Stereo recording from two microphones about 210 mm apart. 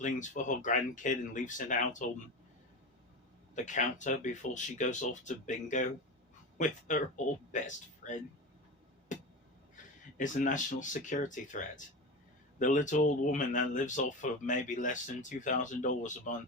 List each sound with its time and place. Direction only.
0.0 s speech: 35° left (ahead or behind)
3.5 s speech: 35° left (ahead or behind)
8.0 s speech: 35° left (ahead or behind)
9.1 s a sound: 35° left (ahead or behind)
9.7 s speech: 35° left (ahead or behind)